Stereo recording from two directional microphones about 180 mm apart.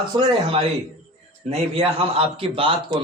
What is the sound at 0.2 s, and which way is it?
A man's voice, 35° right (ahead or behind).